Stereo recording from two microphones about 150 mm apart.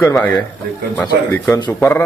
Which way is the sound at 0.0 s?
20° left (ahead or behind).